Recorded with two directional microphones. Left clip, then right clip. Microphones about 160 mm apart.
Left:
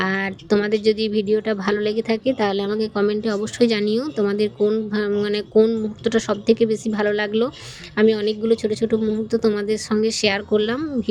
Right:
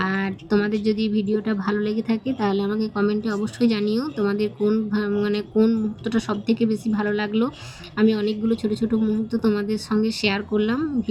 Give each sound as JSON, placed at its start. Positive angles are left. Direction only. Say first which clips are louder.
{"t": 0.0, "sound": "speech", "louder": "left 3 dB", "side_deg": 35}